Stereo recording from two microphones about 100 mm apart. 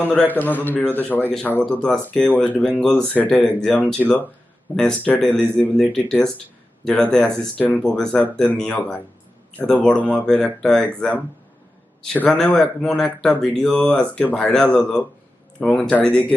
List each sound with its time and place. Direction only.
0.0 s speech: 10° left (ahead or behind)
12.1 s speech: 10° left (ahead or behind)